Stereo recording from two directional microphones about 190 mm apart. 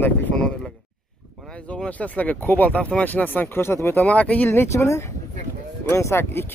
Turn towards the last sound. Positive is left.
turn(degrees=15)  # may be behind; listen again after turning